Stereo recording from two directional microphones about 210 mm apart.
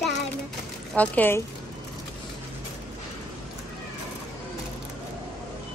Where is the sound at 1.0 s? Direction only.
10° left (ahead or behind).